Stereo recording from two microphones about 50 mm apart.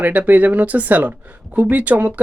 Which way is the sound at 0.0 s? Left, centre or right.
Right.